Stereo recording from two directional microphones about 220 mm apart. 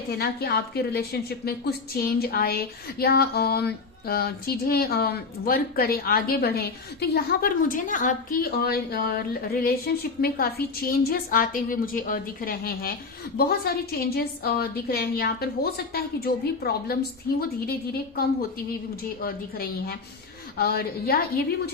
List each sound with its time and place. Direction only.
0.2 s a woman's voice: 45° left (ahead or behind)
19.2 s a woman's voice: 45° left (ahead or behind)